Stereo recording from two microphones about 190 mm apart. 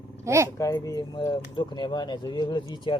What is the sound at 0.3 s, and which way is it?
Speech, 15° right (ahead or behind).